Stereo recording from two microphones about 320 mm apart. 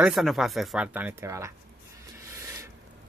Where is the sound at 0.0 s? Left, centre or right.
Centre.